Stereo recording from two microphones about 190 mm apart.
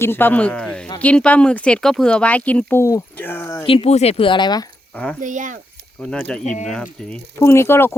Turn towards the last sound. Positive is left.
turn(degrees=15)  # may be behind; listen again after turning